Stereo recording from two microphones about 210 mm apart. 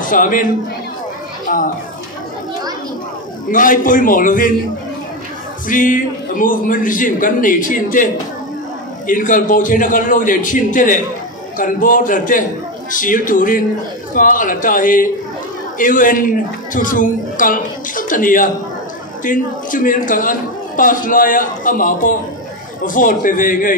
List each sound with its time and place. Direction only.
0.1 s a man's voice: 40° left (ahead or behind)
1.4 s a sound: 40° left (ahead or behind)
3.5 s a man's voice: 40° left (ahead or behind)
5.7 s a man's voice: 40° left (ahead or behind)